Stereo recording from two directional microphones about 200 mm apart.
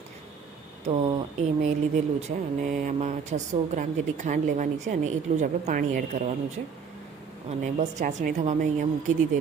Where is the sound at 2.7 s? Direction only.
40° right (ahead or behind).